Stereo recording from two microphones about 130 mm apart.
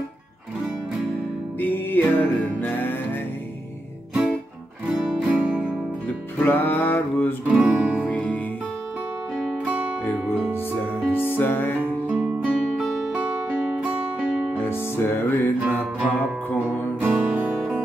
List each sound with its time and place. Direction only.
1.6 s music: 15° left (ahead or behind)
4.8 s music: 5° right (ahead or behind)
6.0 s music: 15° left (ahead or behind)
7.4 s music: 10° right (ahead or behind)
8.1 s music: 10° left (ahead or behind)
11.1 s music: 15° left (ahead or behind)
12.1 s music: 10° right (ahead or behind)
14.6 s music: 20° left (ahead or behind)
15.6 s music: 10° right (ahead or behind)